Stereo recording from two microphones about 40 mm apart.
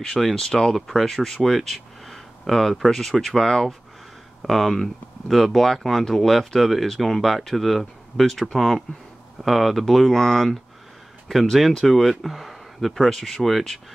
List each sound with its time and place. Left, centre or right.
0.0 s speech: centre
8.5 s speech: centre